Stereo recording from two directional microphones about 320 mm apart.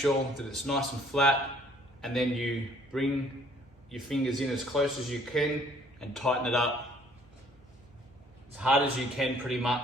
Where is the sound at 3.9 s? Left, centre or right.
Centre.